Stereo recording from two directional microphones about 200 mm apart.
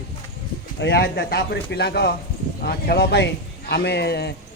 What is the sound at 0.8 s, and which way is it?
A man's voice, 55° left (ahead or behind).